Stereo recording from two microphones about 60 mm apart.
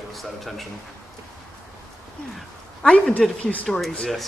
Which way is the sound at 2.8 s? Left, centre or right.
Centre.